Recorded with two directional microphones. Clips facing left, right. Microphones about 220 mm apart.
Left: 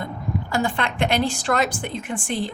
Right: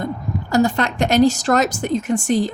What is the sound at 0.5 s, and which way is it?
A woman's voice, 40° right (ahead or behind).